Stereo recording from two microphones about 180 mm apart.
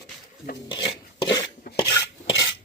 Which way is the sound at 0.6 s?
25° left (ahead or behind).